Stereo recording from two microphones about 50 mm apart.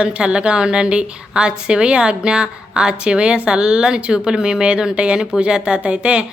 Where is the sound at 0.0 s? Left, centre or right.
Right.